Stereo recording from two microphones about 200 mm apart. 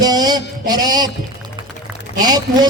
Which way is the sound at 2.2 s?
20° right (ahead or behind).